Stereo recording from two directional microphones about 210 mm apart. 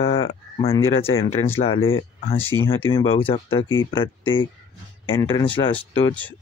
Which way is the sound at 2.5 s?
15° left (ahead or behind).